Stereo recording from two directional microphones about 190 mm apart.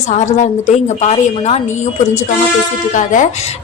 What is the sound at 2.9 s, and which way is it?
Speech, 40° left (ahead or behind).